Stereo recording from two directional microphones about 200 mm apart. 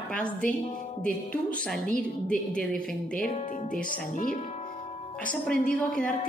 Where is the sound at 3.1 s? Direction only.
45° left (ahead or behind).